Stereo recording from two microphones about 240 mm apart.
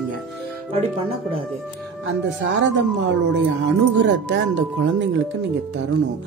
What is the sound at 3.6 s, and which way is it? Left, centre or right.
Speech, right.